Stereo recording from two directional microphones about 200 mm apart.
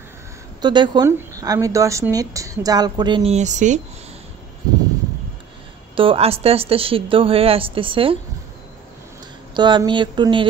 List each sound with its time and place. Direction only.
0.6 s speech: 20° right (ahead or behind)
5.9 s speech: 30° right (ahead or behind)
9.5 s speech: 20° right (ahead or behind)